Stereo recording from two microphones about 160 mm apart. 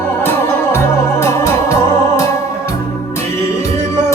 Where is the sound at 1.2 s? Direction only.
15° left (ahead or behind).